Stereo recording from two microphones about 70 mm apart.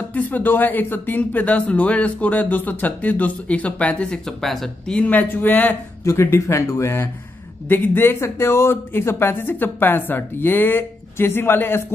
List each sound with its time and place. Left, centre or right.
0.1 s speech: left
4.4 s speech: centre
4.9 s speech: left
6.0 s speech: left
7.6 s speech: left